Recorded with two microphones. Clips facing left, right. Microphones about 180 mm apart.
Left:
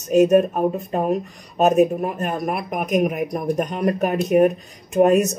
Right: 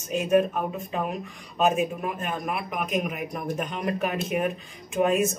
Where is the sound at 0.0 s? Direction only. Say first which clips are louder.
Left 8 dB; 40° left (ahead or behind).